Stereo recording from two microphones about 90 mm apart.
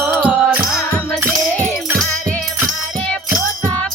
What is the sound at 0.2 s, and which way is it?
Music, 15° right (ahead or behind).